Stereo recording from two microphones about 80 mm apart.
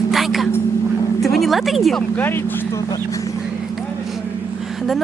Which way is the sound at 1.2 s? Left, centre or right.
Centre.